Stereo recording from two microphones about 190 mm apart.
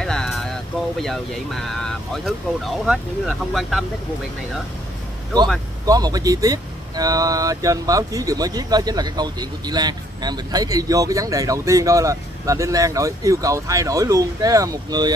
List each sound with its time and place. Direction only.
0.0 s a sound: 5° left (ahead or behind)
1.0 s speech: centre (ahead or behind)
5.9 s speech: 20° right (ahead or behind)